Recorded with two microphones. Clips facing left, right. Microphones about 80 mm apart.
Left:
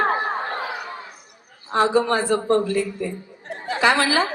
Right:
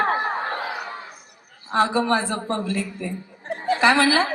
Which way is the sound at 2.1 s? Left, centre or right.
Right.